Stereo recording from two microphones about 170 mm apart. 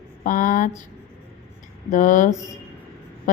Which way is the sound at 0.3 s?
50° left (ahead or behind).